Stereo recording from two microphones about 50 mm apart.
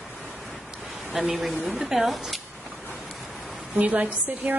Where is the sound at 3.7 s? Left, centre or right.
Right.